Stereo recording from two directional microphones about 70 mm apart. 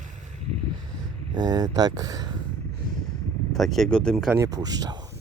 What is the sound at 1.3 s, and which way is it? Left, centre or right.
Speech, right.